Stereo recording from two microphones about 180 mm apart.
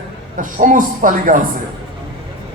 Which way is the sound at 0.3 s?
50° right (ahead or behind).